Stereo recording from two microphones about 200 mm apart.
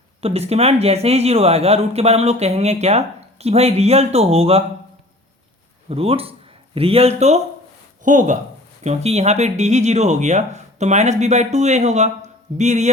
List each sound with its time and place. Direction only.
0.2 s speech: 30° right (ahead or behind)
5.9 s speech: 30° right (ahead or behind)